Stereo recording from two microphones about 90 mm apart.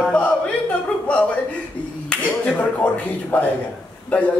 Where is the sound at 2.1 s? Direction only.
20° left (ahead or behind).